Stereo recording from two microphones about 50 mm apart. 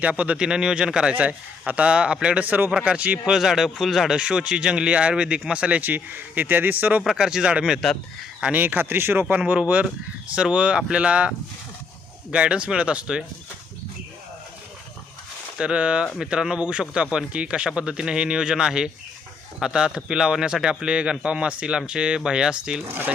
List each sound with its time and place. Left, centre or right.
0.0 s speech: right
1.1 s speech: right
3.3 s speech: centre
4.1 s speech: centre
7.1 s speech: centre
8.5 s speech: right
10.3 s speech: right
12.3 s speech: right
15.5 s speech: centre
22.9 s speech: right